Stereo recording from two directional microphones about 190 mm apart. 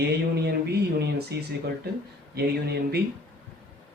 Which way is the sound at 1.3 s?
60° right (ahead or behind).